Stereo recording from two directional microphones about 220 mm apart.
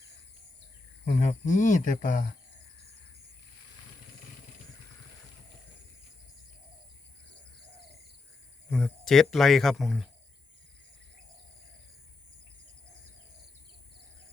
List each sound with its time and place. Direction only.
1.0 s speech: 30° left (ahead or behind)
8.7 s speech: centre (ahead or behind)